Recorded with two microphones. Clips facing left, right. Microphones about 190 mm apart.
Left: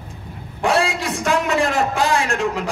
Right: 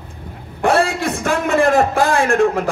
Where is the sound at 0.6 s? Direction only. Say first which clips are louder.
Right 3 dB; 55° right (ahead or behind).